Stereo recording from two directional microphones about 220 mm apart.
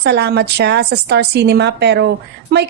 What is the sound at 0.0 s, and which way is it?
A woman's voice, 50° right (ahead or behind).